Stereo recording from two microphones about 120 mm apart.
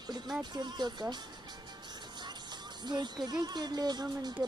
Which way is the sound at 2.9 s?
35° right (ahead or behind).